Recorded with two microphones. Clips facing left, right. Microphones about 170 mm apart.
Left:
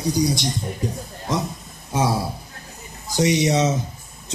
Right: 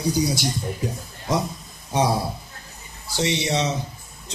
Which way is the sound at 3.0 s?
15° left (ahead or behind).